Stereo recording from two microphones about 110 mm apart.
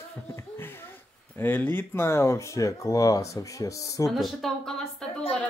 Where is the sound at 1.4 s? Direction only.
20° left (ahead or behind).